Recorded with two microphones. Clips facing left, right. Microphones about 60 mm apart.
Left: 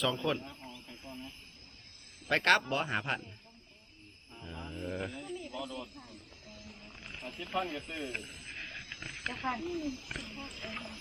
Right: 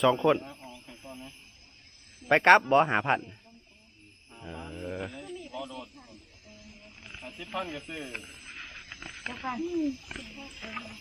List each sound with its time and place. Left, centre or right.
0.0 s speech: right
0.5 s a sound: centre
2.3 s speech: right
2.6 s a man's voice: right
2.9 s speech: right
4.3 s speech: centre
7.2 s speech: centre
8.4 s a sound: centre
8.9 s snake: centre
9.3 s speech: centre